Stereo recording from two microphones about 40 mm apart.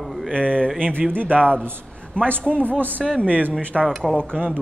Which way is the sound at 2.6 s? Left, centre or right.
Right.